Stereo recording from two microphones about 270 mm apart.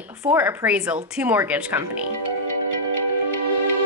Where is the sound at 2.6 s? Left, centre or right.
Right.